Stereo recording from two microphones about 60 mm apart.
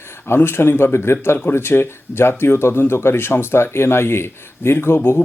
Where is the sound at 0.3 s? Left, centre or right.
Left.